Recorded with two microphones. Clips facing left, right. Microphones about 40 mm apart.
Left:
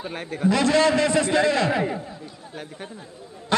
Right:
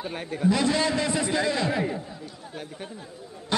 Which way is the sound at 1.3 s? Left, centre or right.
Left.